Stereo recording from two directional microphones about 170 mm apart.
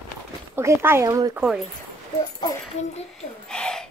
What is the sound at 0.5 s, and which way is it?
Speech, 15° right (ahead or behind).